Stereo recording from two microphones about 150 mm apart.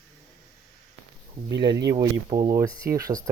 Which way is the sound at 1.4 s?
30° right (ahead or behind).